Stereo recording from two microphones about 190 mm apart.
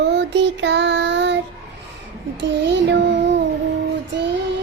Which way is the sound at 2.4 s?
65° right (ahead or behind).